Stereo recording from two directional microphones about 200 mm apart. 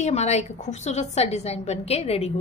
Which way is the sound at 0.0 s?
35° left (ahead or behind).